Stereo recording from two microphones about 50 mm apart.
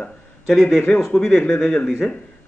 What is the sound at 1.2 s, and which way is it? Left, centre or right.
Speech, left.